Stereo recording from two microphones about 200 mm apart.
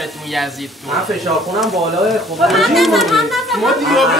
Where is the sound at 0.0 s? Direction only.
Centre (ahead or behind).